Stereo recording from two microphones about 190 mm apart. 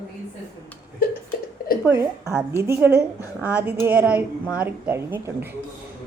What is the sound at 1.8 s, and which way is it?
Speech, 15° right (ahead or behind).